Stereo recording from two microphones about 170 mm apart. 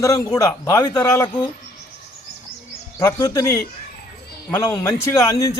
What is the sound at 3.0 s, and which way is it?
Speech, 20° left (ahead or behind).